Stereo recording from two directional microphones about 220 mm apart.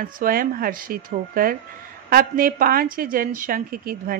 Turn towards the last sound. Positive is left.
turn(degrees=-40)  # may be behind; listen again after turning